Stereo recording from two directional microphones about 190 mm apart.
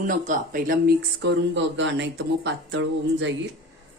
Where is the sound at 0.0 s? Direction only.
45° right (ahead or behind).